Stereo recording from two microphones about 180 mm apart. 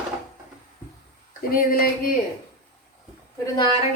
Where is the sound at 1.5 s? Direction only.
55° left (ahead or behind).